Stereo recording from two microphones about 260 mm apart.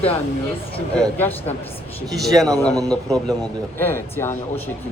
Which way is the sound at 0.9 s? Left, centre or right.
Centre.